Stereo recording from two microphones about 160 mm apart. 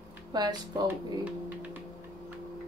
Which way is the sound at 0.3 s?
25° right (ahead or behind).